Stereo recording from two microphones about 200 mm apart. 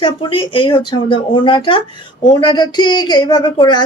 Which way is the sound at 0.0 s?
25° left (ahead or behind).